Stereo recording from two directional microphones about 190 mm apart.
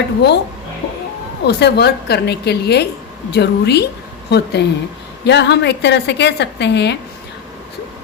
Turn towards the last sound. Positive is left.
turn(degrees=65)  # may be behind; listen again after turning